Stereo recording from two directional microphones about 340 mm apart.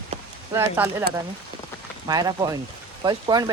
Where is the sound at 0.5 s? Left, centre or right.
Centre.